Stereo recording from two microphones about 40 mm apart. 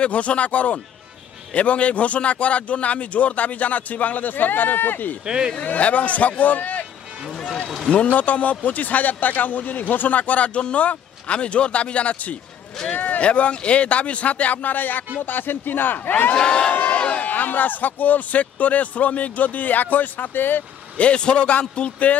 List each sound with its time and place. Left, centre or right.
0.0 s a man's voice: left
5.2 s speech: centre
5.7 s a man's voice: left
7.3 s run: centre
7.9 s a man's voice: left
12.9 s a sound: left
13.2 s a man's voice: left
16.3 s a man's voice: left
16.7 s a sound: left
17.3 s speech: left
21.0 s a man's voice: left